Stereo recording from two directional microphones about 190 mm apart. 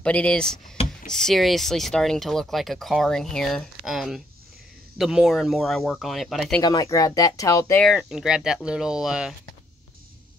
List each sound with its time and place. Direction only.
0.0 s speech: 5° left (ahead or behind)
6.6 s speech: 20° left (ahead or behind)
7.8 s speech: centre (ahead or behind)